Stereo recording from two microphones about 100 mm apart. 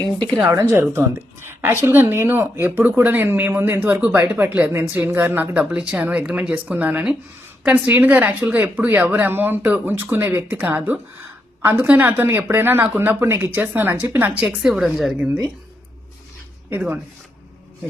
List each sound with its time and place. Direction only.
0.7 s speech: 25° right (ahead or behind); by 14.8 s 5° right (ahead or behind)
16.6 s speech: 20° right (ahead or behind)